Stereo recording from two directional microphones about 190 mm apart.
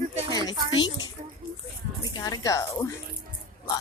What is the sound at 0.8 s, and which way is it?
A woman's voice, 20° left (ahead or behind).